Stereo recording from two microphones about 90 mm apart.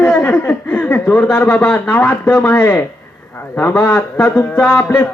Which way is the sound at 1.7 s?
25° left (ahead or behind).